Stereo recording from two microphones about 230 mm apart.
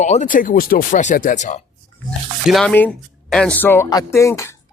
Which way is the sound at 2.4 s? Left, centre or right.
Centre.